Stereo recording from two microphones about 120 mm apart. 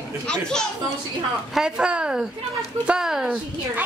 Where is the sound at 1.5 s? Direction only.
5° right (ahead or behind).